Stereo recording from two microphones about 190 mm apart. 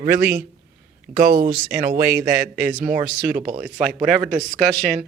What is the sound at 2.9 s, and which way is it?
Speech, 5° right (ahead or behind).